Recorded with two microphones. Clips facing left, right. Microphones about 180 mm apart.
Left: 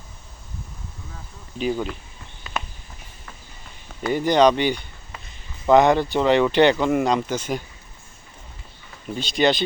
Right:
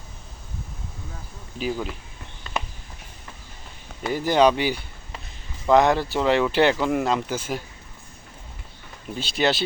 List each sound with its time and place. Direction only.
1.5 s speech: 5° right (ahead or behind)
4.0 s speech: 5° right (ahead or behind)
9.1 s speech: 5° right (ahead or behind)